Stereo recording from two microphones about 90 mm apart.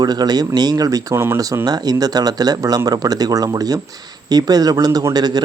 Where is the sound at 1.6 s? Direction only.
45° right (ahead or behind).